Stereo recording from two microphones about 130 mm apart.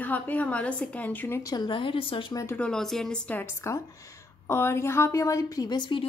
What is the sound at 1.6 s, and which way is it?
Speech, 40° left (ahead or behind).